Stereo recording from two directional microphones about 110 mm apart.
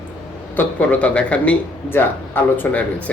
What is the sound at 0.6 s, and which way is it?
Speech, 15° left (ahead or behind).